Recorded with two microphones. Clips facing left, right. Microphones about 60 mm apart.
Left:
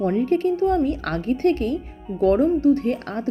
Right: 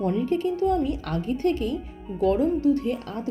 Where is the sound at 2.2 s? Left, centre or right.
Left.